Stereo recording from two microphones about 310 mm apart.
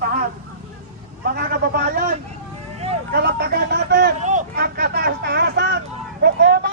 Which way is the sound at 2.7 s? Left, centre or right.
Right.